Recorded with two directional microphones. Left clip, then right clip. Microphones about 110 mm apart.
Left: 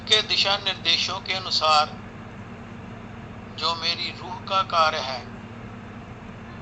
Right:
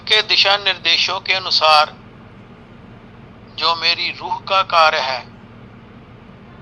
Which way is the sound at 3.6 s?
35° right (ahead or behind).